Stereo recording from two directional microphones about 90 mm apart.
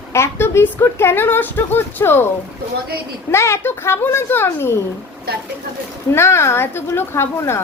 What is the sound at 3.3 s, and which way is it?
Speech, 30° left (ahead or behind).